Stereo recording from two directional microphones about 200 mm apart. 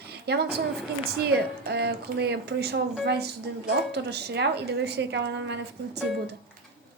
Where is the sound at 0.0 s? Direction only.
55° right (ahead or behind).